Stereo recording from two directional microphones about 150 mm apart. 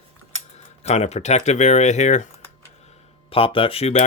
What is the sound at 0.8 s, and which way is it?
Speech, 50° left (ahead or behind).